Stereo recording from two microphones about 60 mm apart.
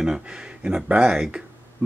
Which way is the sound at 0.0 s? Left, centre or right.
Centre.